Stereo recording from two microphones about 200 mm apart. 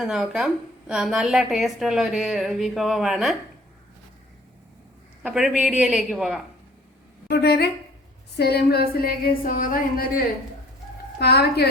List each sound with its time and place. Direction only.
0.0 s a woman's voice: centre (ahead or behind)
5.2 s a woman's voice: 5° right (ahead or behind)
7.3 s a woman's voice: 55° left (ahead or behind)
11.2 s a woman's voice: 55° left (ahead or behind)